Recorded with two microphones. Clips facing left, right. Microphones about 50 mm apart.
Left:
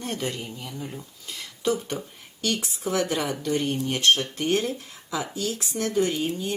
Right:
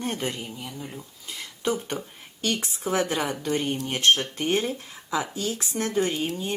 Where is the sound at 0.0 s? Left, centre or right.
Right.